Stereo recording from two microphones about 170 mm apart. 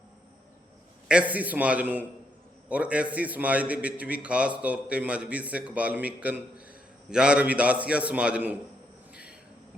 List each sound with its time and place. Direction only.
1.0 s a man's voice: 5° right (ahead or behind)